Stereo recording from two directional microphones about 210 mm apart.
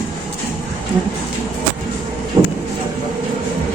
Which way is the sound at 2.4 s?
20° right (ahead or behind).